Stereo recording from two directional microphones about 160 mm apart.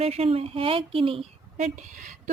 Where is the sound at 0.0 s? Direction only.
40° right (ahead or behind).